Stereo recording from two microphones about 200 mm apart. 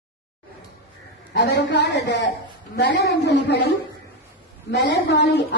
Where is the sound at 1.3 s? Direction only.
55° left (ahead or behind).